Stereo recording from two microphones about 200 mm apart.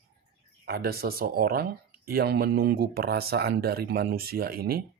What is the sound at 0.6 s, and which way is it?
Speech, 50° right (ahead or behind).